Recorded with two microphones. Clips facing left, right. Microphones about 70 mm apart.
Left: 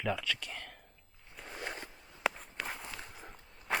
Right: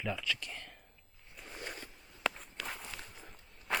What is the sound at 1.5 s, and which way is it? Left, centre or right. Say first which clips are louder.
Zipper: left 3 dB; left.